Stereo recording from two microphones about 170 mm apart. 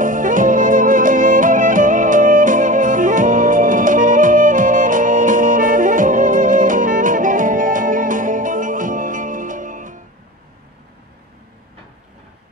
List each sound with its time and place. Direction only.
0.0 s music: 50° right (ahead or behind)